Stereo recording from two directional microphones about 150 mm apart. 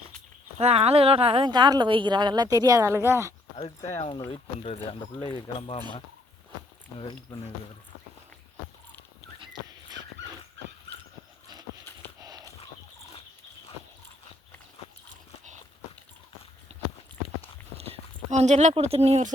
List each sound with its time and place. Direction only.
0.6 s speech: 40° right (ahead or behind); by 3.3 s 20° right (ahead or behind)
3.8 s speech: 45° left (ahead or behind)
7.0 s speech: 30° left (ahead or behind)
9.4 s dog: 30° right (ahead or behind)
12.2 s horse: 25° right (ahead or behind)
17.7 s clip-clop: 45° right (ahead or behind)
18.7 s speech: 40° right (ahead or behind)